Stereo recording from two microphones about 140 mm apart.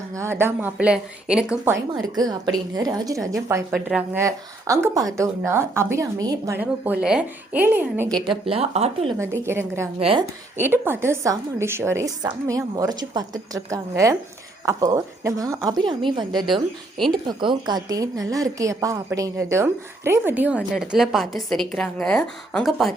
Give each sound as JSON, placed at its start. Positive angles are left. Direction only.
{"t": 0.1, "sound": "a woman's voice", "side_deg": -20}
{"t": 2.0, "sound": "a woman's voice", "side_deg": -30}
{"t": 3.7, "sound": "speech", "side_deg": -5}
{"t": 4.2, "sound": "a woman's voice", "side_deg": -20}
{"t": 6.6, "sound": "a woman's voice", "side_deg": -10}
{"t": 8.3, "sound": "speech", "side_deg": -40}
{"t": 9.1, "sound": "a woman's voice", "side_deg": -20}
{"t": 10.0, "sound": "speech", "side_deg": -40}
{"t": 10.6, "sound": "a woman's voice", "side_deg": -15}